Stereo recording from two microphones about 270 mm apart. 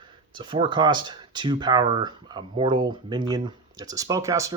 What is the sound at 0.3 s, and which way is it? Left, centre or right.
Speech, centre.